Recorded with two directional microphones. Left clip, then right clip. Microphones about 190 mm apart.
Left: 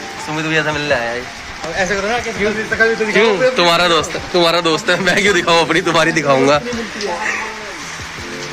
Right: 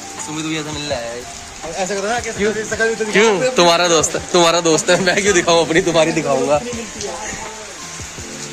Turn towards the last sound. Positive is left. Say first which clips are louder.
# left 4 dB
turn(degrees=35)  # may be behind; listen again after turning